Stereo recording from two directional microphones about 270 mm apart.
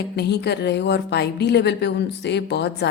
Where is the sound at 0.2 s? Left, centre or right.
Left.